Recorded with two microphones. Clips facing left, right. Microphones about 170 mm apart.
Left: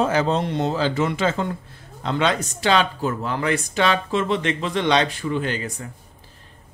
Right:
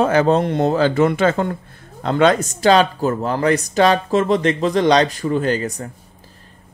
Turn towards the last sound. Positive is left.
turn(degrees=-40)  # may be behind; listen again after turning